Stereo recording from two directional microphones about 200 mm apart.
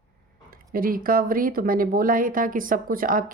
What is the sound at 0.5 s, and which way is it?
Speech, 45° right (ahead or behind).